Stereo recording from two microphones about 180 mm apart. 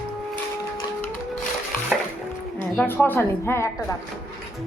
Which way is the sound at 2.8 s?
10° left (ahead or behind).